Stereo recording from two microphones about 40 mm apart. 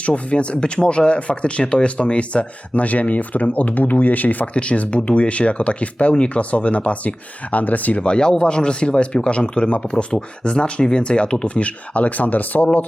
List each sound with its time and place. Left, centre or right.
0.0 s speech: left
4.5 s speech: left
8.0 s speech: left